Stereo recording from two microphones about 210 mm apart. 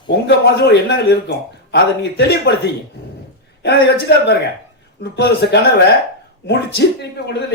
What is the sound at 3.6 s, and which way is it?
Speech, 55° left (ahead or behind).